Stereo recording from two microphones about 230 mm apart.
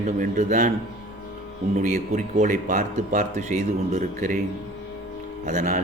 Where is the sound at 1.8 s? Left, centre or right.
Right.